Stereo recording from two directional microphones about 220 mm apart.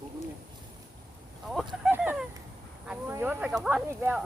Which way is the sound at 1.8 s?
5° right (ahead or behind).